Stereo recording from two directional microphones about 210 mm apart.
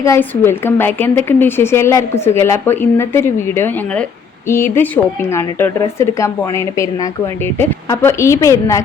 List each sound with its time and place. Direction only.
0.0 s a woman's voice: 10° left (ahead or behind)
7.6 s a woman's voice: 10° left (ahead or behind)